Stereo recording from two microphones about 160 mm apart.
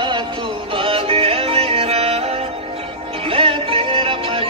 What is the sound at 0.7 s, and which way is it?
Music, 35° right (ahead or behind).